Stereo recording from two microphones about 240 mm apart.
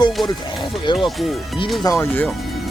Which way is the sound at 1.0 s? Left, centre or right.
Centre.